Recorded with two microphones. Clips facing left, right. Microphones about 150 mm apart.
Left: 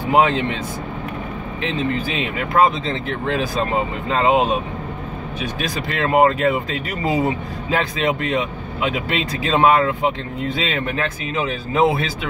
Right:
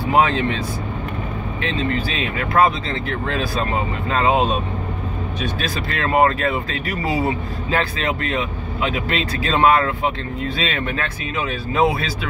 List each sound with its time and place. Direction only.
0.0 s speech: 20° left (ahead or behind)
1.6 s speech: 20° left (ahead or behind)